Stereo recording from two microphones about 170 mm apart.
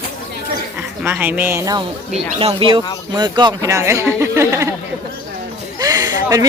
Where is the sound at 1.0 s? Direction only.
10° right (ahead or behind).